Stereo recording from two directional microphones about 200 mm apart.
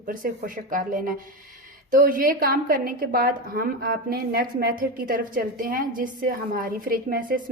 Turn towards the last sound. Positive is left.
turn(degrees=-45)  # may be behind; listen again after turning